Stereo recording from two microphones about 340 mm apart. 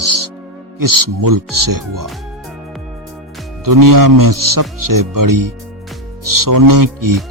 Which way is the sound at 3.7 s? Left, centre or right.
Right.